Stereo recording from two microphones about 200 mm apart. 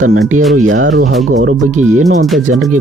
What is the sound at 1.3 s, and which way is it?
Speech, 40° right (ahead or behind).